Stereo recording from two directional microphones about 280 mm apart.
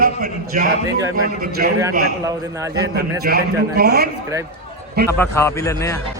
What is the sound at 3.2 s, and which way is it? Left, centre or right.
Speech, right.